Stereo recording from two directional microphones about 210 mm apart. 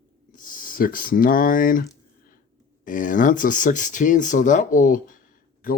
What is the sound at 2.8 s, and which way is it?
Speech, 40° left (ahead or behind).